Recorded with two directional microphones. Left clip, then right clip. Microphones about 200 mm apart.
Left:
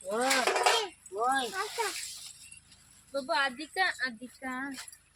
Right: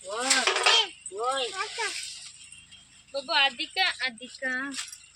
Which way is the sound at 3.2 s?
50° left (ahead or behind).